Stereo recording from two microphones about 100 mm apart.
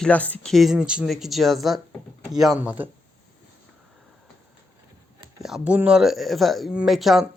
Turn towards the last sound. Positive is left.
turn(degrees=0)  # may be behind; listen again after turning